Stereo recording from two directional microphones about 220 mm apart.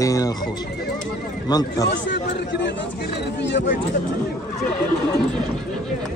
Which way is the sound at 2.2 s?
55° left (ahead or behind).